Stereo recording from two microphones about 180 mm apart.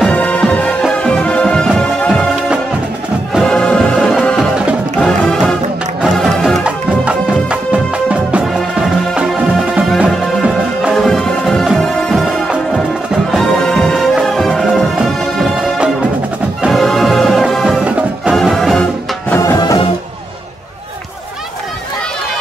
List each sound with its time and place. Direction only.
0.0 s music: 10° left (ahead or behind)
19.6 s music: 25° left (ahead or behind)